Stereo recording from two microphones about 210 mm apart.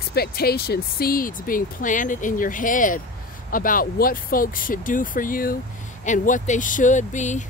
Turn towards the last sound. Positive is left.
turn(degrees=35)  # may be behind; listen again after turning